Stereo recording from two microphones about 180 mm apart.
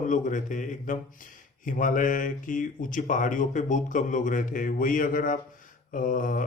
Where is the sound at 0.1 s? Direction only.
45° left (ahead or behind).